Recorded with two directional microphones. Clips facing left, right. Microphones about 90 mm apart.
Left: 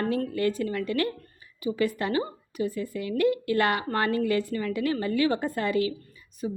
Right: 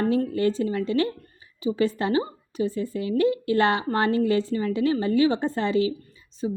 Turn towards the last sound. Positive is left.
turn(degrees=-25)  # may be behind; listen again after turning